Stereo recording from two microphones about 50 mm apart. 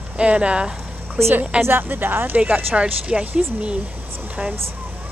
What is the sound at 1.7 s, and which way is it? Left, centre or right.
Speech, right.